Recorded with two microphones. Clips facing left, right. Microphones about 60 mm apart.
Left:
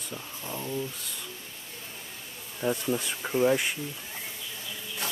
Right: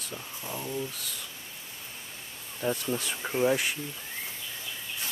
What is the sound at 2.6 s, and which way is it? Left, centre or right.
Speech, centre.